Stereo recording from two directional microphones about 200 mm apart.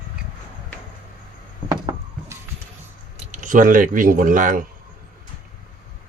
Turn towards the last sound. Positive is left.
turn(degrees=-40)  # may be behind; listen again after turning